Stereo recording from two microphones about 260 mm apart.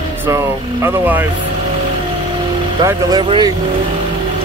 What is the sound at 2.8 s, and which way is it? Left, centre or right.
Speech, centre.